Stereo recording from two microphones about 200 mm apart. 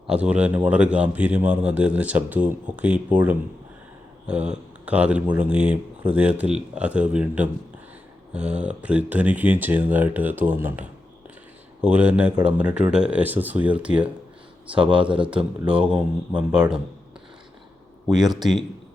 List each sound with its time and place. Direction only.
0.1 s speech: 5° right (ahead or behind)
14.7 s speech: 25° right (ahead or behind)
15.6 s speech: 5° right (ahead or behind)
18.1 s speech: 20° right (ahead or behind)